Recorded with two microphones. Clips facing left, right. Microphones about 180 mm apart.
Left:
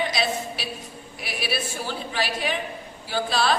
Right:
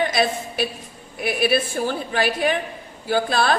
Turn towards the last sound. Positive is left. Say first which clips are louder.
# right 4 dB
turn(degrees=-50)  # may be behind; listen again after turning